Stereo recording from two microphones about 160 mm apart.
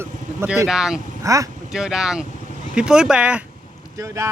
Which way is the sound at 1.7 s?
5° right (ahead or behind).